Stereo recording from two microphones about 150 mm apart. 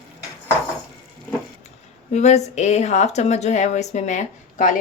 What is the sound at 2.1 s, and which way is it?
A woman's voice, 50° left (ahead or behind).